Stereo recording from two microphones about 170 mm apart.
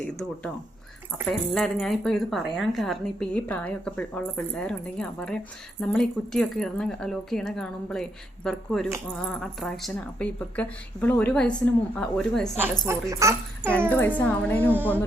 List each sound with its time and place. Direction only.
0.1 s speech: 5° left (ahead or behind)
12.9 s speech: 15° right (ahead or behind)
13.9 s a woman's voice: 10° left (ahead or behind)
14.7 s speech: 10° right (ahead or behind)